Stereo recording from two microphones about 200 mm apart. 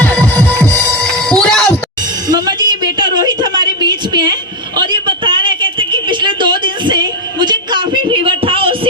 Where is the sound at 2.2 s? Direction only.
20° right (ahead or behind).